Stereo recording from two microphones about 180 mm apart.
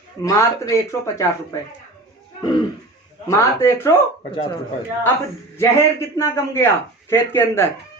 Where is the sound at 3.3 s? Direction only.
15° left (ahead or behind).